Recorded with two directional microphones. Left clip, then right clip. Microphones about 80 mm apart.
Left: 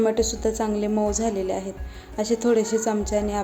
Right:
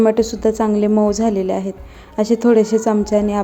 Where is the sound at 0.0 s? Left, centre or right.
Right.